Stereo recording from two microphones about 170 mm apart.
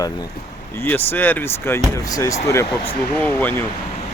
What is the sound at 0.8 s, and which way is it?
Speech, 10° left (ahead or behind).